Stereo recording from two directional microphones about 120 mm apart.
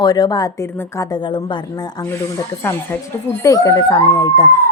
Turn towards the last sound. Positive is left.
turn(degrees=25)  # may be behind; listen again after turning